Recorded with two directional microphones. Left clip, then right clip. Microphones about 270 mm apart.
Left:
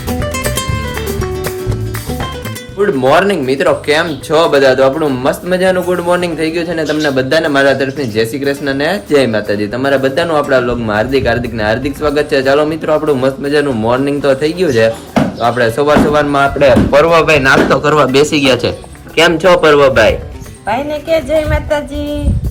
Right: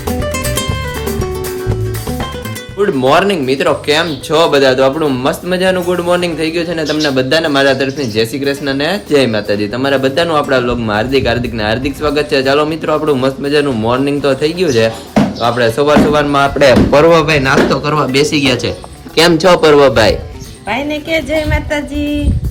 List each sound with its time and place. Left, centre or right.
0.1 s music: centre
2.8 s speech: centre
16.6 s speech: right
17.2 s speech: centre
21.5 s music: centre